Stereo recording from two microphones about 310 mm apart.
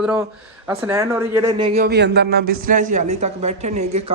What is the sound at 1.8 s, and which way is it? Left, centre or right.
Speech, right.